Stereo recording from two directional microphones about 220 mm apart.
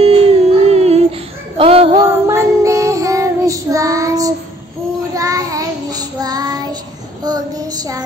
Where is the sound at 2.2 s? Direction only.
15° right (ahead or behind).